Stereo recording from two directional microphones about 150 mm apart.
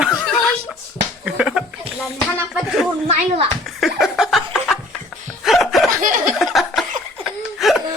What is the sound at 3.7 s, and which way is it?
Laughter, centre (ahead or behind).